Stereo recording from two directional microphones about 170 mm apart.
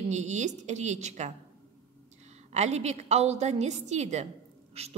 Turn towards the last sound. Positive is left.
turn(degrees=-40)  # may be behind; listen again after turning